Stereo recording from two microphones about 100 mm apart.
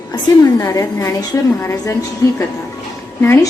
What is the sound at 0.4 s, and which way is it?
A woman's voice, 35° left (ahead or behind).